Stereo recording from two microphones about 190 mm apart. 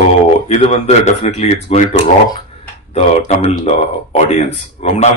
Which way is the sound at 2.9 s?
35° left (ahead or behind).